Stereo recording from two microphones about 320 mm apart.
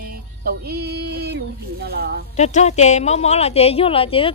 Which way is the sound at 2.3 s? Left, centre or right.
Left.